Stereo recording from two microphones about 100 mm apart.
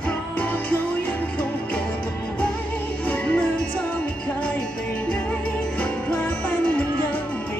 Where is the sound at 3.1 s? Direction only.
15° left (ahead or behind).